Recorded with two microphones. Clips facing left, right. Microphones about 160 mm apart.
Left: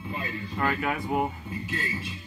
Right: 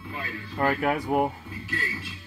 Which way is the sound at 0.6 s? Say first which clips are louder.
Right 4 dB; 40° right (ahead or behind).